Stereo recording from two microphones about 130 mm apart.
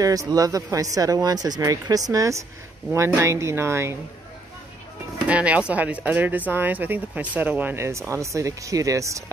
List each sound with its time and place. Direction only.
0.0 s speech: 25° right (ahead or behind)
5.2 s speech: 10° right (ahead or behind); by 9.2 s 25° right (ahead or behind)